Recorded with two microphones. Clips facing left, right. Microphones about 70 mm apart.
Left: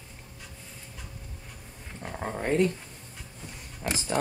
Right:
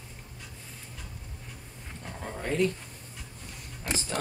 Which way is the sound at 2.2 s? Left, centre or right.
Left.